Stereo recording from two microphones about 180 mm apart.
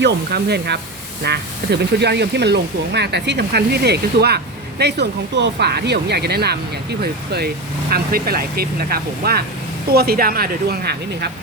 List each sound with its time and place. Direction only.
0.0 s speech: 65° right (ahead or behind)